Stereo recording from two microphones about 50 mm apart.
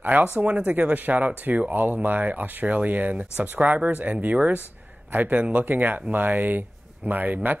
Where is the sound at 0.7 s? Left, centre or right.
Right.